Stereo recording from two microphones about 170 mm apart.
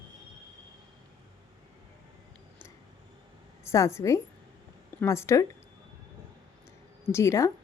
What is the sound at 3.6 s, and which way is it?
A woman's voice, 15° left (ahead or behind).